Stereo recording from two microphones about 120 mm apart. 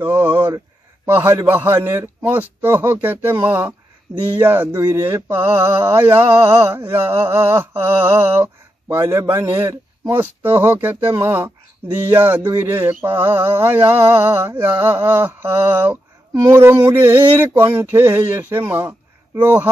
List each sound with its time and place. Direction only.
0.0 s speech: 20° right (ahead or behind)
1.0 s a sound: 20° right (ahead or behind)
19.4 s speech: 20° right (ahead or behind)